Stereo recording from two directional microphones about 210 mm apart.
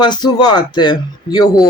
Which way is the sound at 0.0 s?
20° left (ahead or behind).